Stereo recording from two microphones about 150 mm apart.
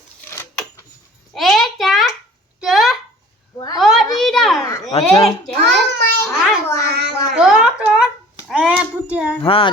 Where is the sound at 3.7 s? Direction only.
Centre (ahead or behind).